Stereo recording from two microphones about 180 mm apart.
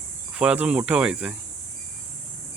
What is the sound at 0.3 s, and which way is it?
Speech, 5° right (ahead or behind).